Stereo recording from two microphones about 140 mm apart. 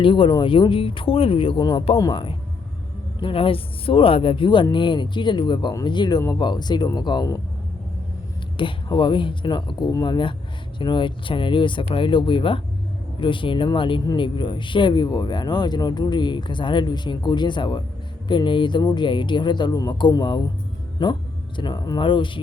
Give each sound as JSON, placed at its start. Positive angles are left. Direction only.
{"t": 0.0, "sound": "speech", "side_deg": 40}
{"t": 8.5, "sound": "speech", "side_deg": 35}